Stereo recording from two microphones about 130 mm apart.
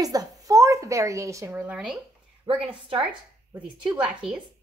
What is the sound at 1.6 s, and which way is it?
Speech, 10° right (ahead or behind).